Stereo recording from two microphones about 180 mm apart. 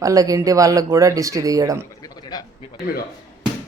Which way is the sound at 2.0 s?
20° left (ahead or behind).